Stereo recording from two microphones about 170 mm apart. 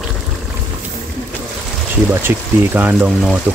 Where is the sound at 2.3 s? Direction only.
15° right (ahead or behind).